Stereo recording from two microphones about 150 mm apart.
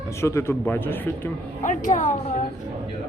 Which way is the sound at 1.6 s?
60° left (ahead or behind).